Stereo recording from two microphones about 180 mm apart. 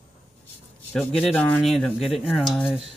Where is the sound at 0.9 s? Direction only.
5° left (ahead or behind).